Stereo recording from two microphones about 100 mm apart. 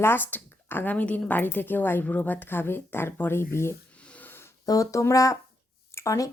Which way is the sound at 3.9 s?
10° left (ahead or behind).